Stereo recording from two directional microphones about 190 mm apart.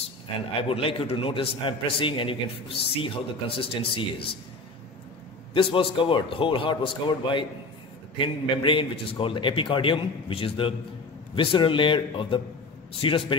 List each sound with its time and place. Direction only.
0.6 s a man's voice: 30° left (ahead or behind)
5.5 s a man's voice: 25° left (ahead or behind)